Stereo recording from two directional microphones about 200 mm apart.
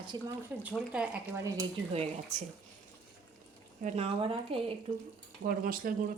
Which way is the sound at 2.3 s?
35° right (ahead or behind).